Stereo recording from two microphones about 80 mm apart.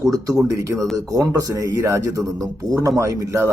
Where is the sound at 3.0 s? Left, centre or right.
Right.